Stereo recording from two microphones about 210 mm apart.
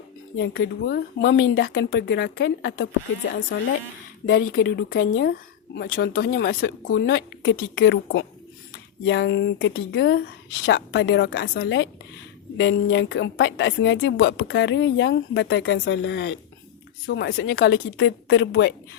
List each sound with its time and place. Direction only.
0.3 s a woman's voice: 60° left (ahead or behind)
4.3 s a woman's voice: 60° left (ahead or behind)